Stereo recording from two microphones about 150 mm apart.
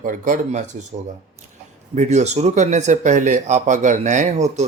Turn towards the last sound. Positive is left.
turn(degrees=-50)  # may be behind; listen again after turning